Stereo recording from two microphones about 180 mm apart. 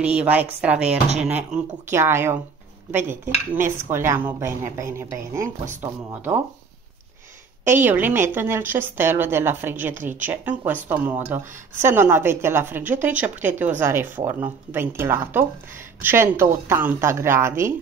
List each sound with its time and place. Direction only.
0.0 s speech: 5° right (ahead or behind)
7.6 s speech: 10° right (ahead or behind)